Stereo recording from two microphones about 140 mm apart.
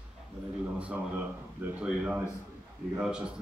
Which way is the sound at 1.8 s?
10° right (ahead or behind).